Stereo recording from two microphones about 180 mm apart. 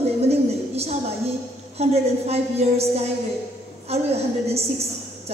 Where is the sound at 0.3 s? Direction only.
35° right (ahead or behind).